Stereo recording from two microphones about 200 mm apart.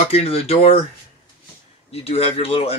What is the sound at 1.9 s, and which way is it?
Speech, 30° left (ahead or behind).